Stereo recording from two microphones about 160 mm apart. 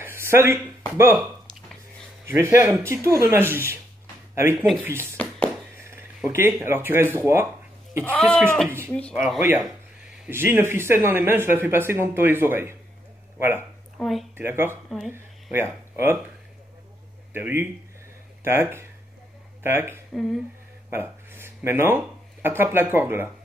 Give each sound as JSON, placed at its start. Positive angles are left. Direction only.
{"t": 0.0, "sound": "a sound", "side_deg": -15}
{"t": 2.2, "sound": "speech", "side_deg": -15}
{"t": 5.1, "sound": "a sound", "side_deg": 10}
{"t": 5.9, "sound": "speech", "side_deg": -15}
{"t": 8.0, "sound": "speech", "side_deg": 10}
{"t": 8.6, "sound": "speech", "side_deg": -15}
{"t": 10.2, "sound": "speech", "side_deg": -15}
{"t": 13.9, "sound": "speech", "side_deg": 0}
{"t": 14.3, "sound": "speech", "side_deg": -15}
{"t": 17.3, "sound": "speech", "side_deg": -15}